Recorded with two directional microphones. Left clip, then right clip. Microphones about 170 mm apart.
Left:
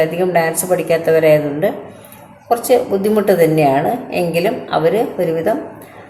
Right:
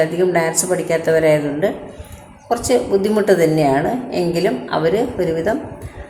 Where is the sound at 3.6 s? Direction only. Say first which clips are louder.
Left 3 dB; centre (ahead or behind).